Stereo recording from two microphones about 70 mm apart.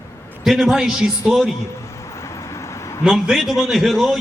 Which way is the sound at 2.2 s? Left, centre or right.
Left.